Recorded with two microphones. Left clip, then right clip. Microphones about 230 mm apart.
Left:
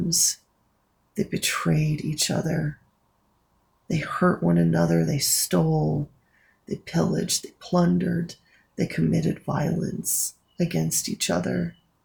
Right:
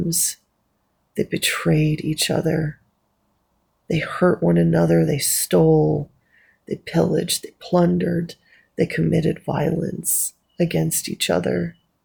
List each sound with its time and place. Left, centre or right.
0.1 s speech: right
3.9 s speech: right